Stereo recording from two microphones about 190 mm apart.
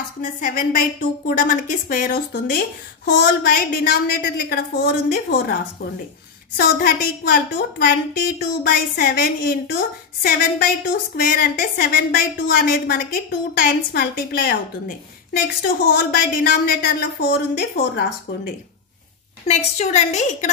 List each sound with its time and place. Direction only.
0.2 s a woman's voice: 45° left (ahead or behind)
19.4 s a woman's voice: 35° left (ahead or behind)